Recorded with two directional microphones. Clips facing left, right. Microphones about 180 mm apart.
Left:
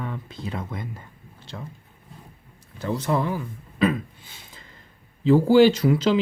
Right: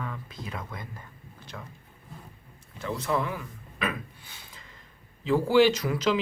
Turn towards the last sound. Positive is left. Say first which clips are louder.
# left 6 dB
turn(degrees=30)  # may be behind; listen again after turning